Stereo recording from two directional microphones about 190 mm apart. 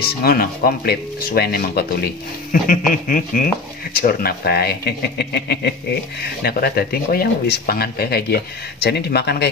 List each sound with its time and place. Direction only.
0.2 s speech: 50° left (ahead or behind)